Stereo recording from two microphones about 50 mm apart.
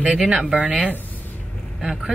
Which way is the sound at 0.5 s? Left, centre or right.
Right.